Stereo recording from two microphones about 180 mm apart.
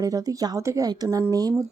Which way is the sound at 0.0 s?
20° right (ahead or behind).